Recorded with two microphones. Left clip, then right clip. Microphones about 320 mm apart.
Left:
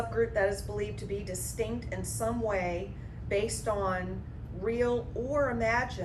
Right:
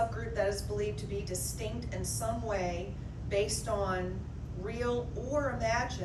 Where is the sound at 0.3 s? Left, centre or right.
Centre.